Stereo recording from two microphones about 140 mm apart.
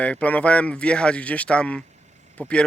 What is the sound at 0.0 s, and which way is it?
Speech, 10° left (ahead or behind).